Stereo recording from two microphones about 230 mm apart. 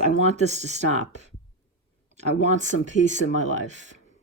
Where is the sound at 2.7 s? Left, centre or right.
Right.